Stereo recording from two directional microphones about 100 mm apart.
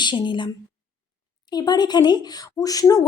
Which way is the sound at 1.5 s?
45° left (ahead or behind).